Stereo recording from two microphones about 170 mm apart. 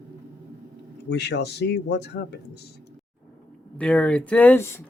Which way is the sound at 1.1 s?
90° left.